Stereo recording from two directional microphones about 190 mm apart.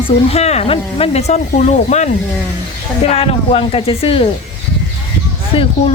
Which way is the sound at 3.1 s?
30° left (ahead or behind).